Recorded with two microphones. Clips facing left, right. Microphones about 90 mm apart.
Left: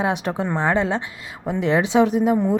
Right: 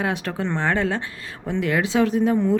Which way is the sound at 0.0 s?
20° left (ahead or behind).